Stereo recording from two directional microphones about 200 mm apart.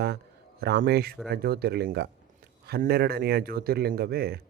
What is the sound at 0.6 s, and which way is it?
Speech, 55° right (ahead or behind).